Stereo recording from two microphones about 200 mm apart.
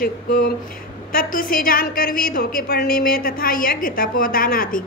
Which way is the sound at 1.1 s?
45° left (ahead or behind).